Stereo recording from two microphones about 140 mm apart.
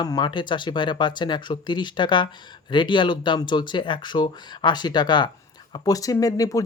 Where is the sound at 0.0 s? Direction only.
30° left (ahead or behind).